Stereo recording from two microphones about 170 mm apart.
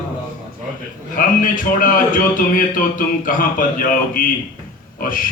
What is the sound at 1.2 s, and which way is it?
A man's voice, 50° left (ahead or behind).